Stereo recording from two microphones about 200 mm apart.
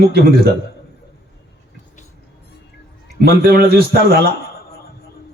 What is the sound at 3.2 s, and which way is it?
A man's voice, 55° right (ahead or behind).